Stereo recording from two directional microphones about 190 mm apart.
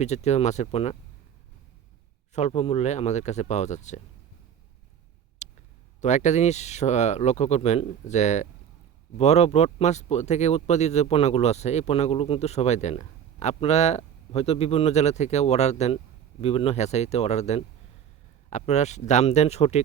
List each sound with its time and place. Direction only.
0.0 s speech: 35° left (ahead or behind)
2.3 s speech: 35° left (ahead or behind)
5.4 s a sound: 40° left (ahead or behind)
6.0 s speech: 40° left (ahead or behind)